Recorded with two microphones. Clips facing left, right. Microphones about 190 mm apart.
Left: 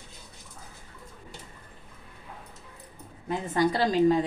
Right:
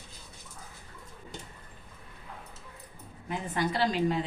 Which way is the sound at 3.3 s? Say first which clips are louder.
Left 5 dB; 40° left (ahead or behind).